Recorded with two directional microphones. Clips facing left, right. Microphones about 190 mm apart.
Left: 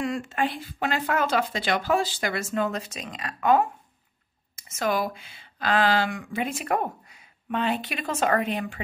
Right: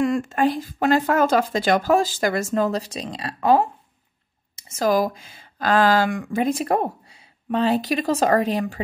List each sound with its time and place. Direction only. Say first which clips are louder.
0.0 s speech: right 7 dB; 45° right (ahead or behind)